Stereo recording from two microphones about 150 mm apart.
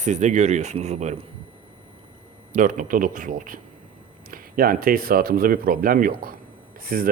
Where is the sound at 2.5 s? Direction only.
60° right (ahead or behind).